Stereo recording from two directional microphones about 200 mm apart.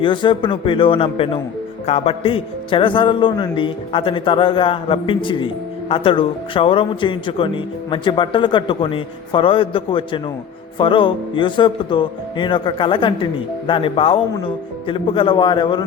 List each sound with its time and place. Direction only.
0.0 s speech: 25° left (ahead or behind)